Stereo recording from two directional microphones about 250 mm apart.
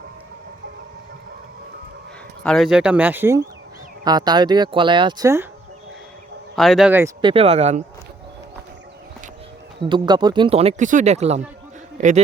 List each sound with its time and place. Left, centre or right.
2.4 s speech: centre
6.6 s speech: centre
7.2 s speech: right
9.9 s speech: centre